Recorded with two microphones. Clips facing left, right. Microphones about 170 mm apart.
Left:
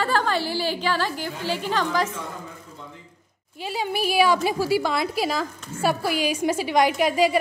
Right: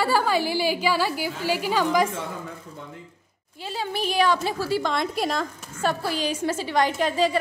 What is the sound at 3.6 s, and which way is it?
A woman's voice, 10° left (ahead or behind).